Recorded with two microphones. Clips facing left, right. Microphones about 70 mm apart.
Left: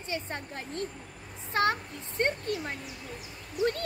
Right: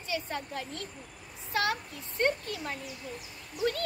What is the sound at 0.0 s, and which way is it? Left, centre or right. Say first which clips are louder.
A woman's voice: right 1 dB; left.